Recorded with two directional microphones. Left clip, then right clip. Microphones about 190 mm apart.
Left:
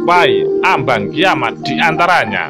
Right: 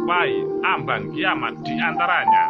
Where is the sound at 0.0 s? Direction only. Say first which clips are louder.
Left 10 dB; 55° left (ahead or behind).